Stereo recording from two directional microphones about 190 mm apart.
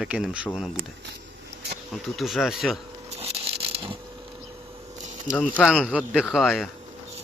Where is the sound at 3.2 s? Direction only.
30° right (ahead or behind).